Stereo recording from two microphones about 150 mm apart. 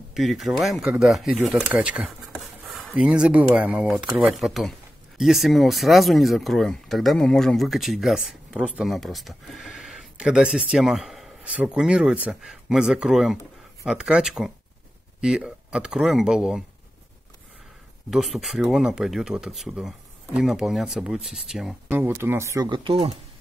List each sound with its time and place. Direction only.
0.1 s speech: centre (ahead or behind)
1.4 s a sound: 5° right (ahead or behind)
2.9 s speech: 5° right (ahead or behind)
18.1 s speech: centre (ahead or behind)
21.9 s speech: 15° right (ahead or behind)
22.7 s speech: 35° right (ahead or behind)